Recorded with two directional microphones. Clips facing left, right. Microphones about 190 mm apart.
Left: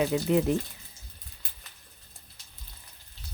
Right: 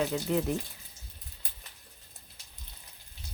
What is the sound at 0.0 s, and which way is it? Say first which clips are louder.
Speech: left 4 dB; 15° left (ahead or behind).